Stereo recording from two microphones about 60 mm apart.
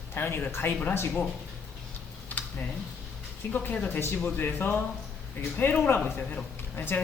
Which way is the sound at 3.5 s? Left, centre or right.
Left.